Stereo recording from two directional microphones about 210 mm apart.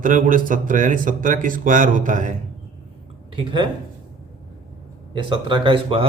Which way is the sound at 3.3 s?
25° right (ahead or behind).